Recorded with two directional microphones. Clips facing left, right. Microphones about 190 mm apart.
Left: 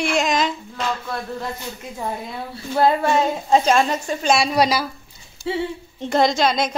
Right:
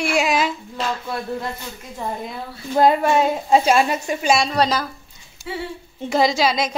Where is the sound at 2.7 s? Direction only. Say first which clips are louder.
Right 2 dB; 15° right (ahead or behind).